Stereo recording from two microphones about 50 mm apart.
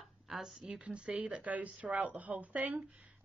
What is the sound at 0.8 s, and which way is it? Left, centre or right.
A woman's voice, right.